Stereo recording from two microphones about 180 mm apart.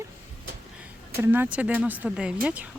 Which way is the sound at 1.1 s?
10° right (ahead or behind).